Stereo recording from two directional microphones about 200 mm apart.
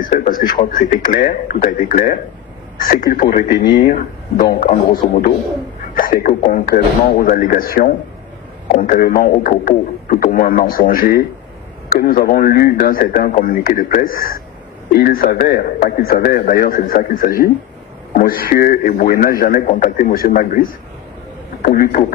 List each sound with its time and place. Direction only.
0.0 s a man's voice: 45° left (ahead or behind)
5.9 s a man's voice: 45° left (ahead or behind)
8.8 s a man's voice: 50° left (ahead or behind)
21.6 s a man's voice: 45° left (ahead or behind)